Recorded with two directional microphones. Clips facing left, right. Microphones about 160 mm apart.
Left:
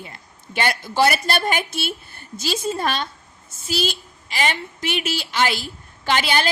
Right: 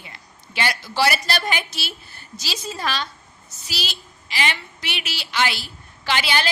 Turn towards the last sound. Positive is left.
turn(degrees=45)  # may be behind; listen again after turning